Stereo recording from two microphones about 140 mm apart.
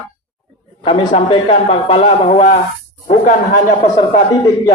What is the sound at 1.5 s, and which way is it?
Speech, 45° left (ahead or behind).